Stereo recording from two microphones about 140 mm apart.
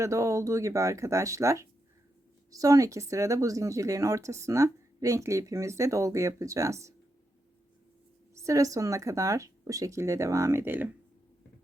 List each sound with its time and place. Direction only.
0.0 s speech: 20° right (ahead or behind)
8.4 s speech: 20° right (ahead or behind)